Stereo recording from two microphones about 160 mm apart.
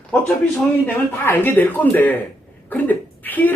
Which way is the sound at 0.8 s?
10° left (ahead or behind).